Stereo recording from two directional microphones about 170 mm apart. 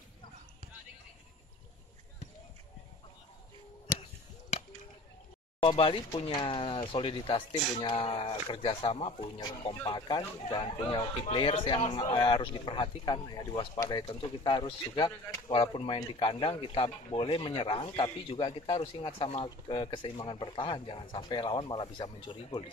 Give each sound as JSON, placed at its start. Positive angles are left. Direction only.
{"t": 5.6, "sound": "speech", "side_deg": 30}
{"t": 15.0, "sound": "speech", "side_deg": 15}
{"t": 15.5, "sound": "speech", "side_deg": 30}